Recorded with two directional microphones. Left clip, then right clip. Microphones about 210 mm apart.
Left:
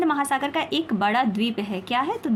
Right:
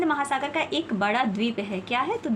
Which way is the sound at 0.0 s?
25° left (ahead or behind).